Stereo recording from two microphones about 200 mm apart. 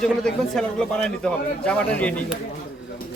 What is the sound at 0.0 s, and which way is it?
A man's voice, centre (ahead or behind).